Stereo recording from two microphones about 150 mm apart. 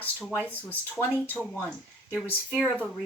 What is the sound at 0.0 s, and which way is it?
A woman's voice, 10° left (ahead or behind).